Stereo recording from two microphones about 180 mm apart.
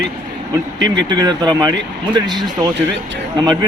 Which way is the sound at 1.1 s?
25° right (ahead or behind).